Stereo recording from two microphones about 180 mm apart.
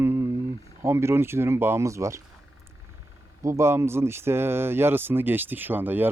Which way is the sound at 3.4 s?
15° right (ahead or behind).